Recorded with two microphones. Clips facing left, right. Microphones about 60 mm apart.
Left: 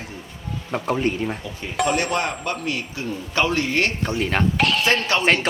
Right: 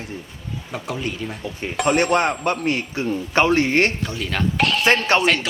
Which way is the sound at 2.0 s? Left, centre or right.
Right.